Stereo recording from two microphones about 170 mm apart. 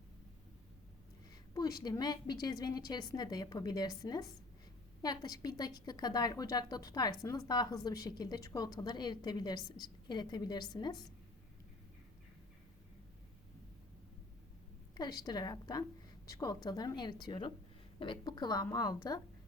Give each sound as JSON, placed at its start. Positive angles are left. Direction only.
{"t": 1.5, "sound": "a woman's voice", "side_deg": 20}
{"t": 14.9, "sound": "a woman's voice", "side_deg": 25}